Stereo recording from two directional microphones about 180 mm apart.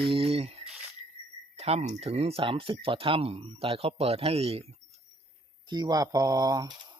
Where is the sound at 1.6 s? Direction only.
35° right (ahead or behind).